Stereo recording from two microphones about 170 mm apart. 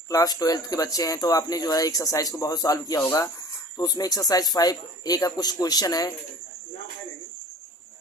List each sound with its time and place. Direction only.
0.1 s speech: 20° left (ahead or behind)